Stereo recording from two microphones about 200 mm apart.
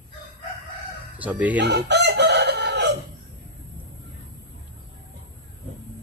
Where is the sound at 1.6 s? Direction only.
60° right (ahead or behind).